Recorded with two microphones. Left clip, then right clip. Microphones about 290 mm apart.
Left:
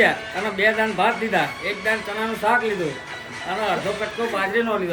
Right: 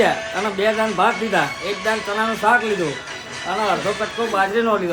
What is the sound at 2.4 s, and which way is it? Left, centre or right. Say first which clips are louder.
Speech: right 3 dB; centre.